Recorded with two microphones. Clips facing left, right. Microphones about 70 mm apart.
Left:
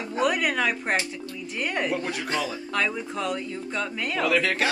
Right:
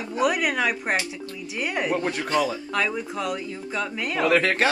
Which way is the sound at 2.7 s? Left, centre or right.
Centre.